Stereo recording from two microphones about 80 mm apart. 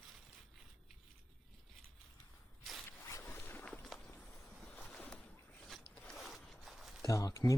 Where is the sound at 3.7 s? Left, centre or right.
Centre.